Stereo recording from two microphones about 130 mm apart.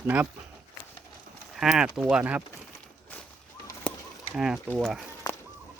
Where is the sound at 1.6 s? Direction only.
5° right (ahead or behind).